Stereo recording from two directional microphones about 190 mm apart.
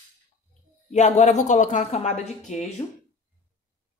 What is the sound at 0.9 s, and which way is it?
A woman's voice, 35° left (ahead or behind).